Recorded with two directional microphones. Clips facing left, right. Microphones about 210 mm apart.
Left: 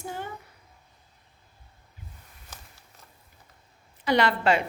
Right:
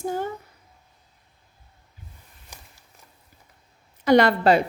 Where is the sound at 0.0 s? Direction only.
40° right (ahead or behind).